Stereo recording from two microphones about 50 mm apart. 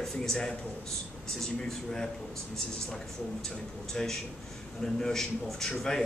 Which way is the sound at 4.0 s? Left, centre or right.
Centre.